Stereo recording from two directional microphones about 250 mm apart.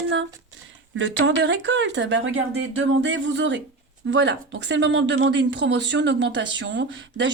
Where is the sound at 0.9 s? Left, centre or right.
Right.